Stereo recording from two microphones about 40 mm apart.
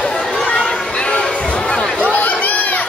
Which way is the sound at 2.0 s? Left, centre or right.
Left.